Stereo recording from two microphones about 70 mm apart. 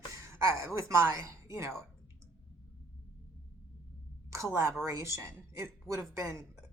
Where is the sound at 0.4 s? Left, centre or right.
Right.